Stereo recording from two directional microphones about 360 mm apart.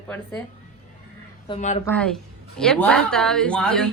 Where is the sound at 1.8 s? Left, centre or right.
Centre.